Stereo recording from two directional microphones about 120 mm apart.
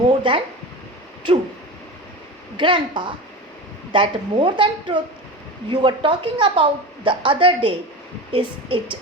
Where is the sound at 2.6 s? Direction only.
45° right (ahead or behind).